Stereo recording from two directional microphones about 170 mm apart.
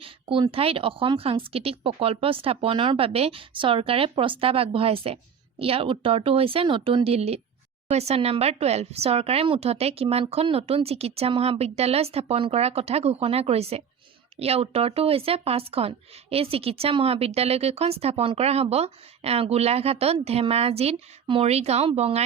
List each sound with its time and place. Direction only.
0.0 s speech: 30° right (ahead or behind)